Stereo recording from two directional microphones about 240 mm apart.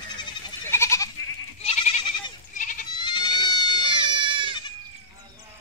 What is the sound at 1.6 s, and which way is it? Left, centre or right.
Goat, left.